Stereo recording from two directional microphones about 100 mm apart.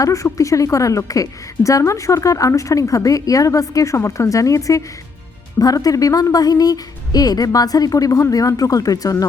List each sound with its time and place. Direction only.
0.0 s a woman's voice: 30° left (ahead or behind)